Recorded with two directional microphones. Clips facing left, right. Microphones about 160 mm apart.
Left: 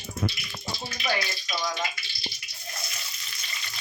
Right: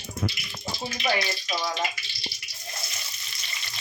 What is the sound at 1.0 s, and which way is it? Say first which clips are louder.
Speech: right 3 dB; 25° right (ahead or behind).